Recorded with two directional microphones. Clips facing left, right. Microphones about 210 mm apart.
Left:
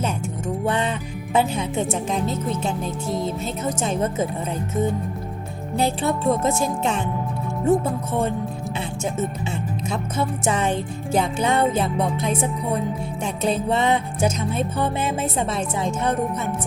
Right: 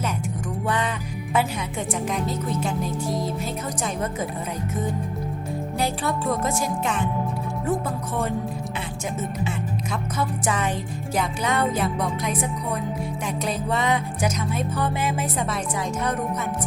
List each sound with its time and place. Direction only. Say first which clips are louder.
0.6 s speech: left 2 dB; 25° left (ahead or behind)
5.7 s speech: left 5 dB; 25° left (ahead or behind)
9.9 s speech: left 3 dB; 25° left (ahead or behind)